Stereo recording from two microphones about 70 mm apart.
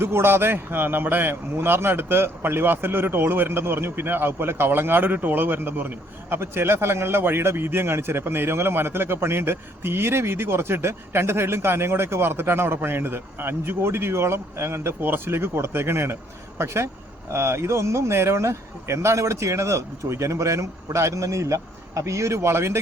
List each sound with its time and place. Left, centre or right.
0.0 s a man's voice: right